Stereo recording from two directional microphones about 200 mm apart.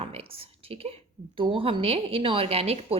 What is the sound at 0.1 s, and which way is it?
A woman's voice, 30° right (ahead or behind).